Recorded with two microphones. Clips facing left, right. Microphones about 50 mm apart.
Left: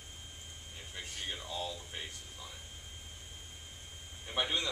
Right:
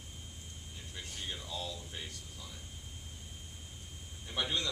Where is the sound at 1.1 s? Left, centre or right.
Left.